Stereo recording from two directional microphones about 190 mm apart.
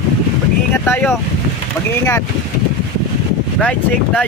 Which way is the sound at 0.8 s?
10° left (ahead or behind).